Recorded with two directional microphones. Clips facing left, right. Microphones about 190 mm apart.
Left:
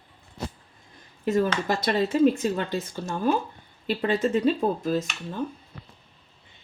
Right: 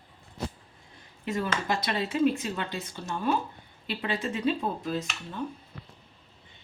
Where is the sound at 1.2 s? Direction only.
40° left (ahead or behind).